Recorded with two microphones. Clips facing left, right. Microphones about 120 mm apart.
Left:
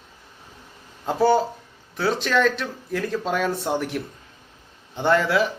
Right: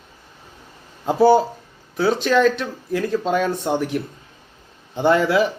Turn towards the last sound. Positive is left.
turn(degrees=-5)  # may be behind; listen again after turning